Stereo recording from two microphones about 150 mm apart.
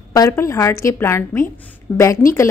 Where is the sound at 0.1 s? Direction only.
20° left (ahead or behind).